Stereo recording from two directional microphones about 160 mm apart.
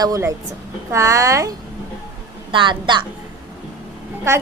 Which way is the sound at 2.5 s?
30° right (ahead or behind).